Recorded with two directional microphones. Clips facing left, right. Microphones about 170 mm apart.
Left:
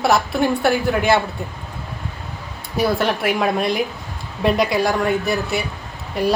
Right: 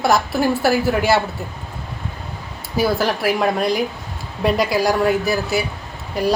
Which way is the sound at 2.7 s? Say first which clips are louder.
Even; centre (ahead or behind).